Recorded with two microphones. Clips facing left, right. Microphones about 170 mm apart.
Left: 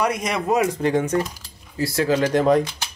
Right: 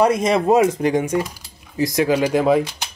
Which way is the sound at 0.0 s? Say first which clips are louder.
Right 7 dB; 30° right (ahead or behind).